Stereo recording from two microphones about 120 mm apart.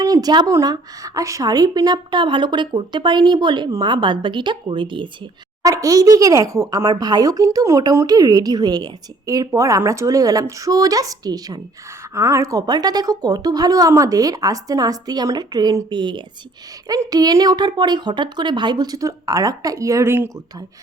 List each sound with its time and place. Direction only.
0.0 s a woman's voice: 30° right (ahead or behind)
5.6 s a woman's voice: 30° right (ahead or behind)